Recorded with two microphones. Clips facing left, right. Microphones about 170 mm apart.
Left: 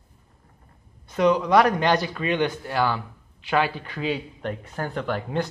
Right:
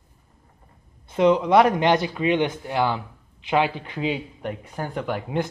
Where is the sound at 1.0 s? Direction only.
25° right (ahead or behind).